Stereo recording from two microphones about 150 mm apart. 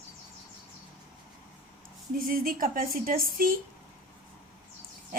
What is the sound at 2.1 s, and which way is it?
Speech, 70° right (ahead or behind).